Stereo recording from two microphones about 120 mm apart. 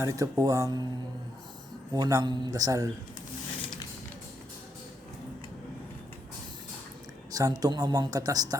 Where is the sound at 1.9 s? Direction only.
30° right (ahead or behind).